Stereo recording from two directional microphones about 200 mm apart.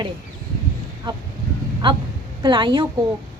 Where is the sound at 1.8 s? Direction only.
25° right (ahead or behind).